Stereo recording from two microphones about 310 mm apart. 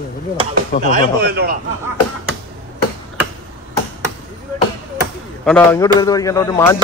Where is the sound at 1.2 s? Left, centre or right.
Right.